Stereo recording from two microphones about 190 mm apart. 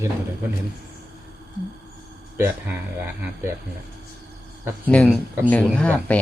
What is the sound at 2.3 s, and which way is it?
Speech, 10° right (ahead or behind).